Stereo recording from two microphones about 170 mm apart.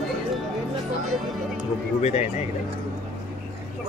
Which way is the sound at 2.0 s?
40° left (ahead or behind).